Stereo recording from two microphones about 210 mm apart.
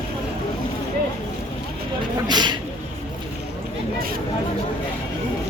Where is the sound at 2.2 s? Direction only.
20° right (ahead or behind).